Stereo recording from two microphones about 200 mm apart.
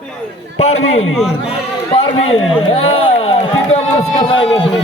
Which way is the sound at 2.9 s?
30° left (ahead or behind).